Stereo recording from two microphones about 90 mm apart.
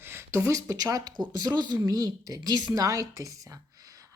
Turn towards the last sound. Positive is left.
turn(degrees=-40)  # may be behind; listen again after turning